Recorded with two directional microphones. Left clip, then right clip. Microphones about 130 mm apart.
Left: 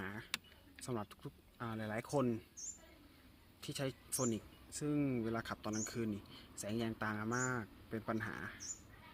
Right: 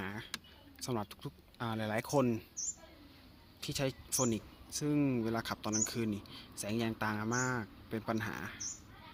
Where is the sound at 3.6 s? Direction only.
10° right (ahead or behind).